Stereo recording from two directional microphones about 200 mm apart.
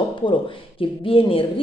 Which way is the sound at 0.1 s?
25° left (ahead or behind).